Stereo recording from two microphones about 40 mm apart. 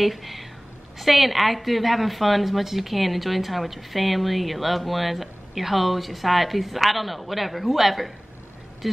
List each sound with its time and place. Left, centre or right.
0.0 s a woman's voice: centre